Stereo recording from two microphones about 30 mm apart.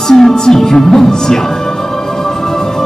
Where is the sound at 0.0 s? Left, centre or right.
Centre.